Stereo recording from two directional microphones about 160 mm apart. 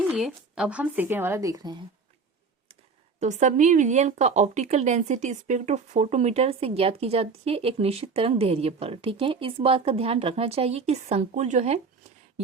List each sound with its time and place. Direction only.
0.1 s a woman's voice: 5° right (ahead or behind); by 1.8 s 25° right (ahead or behind)
3.2 s a woman's voice: 50° right (ahead or behind)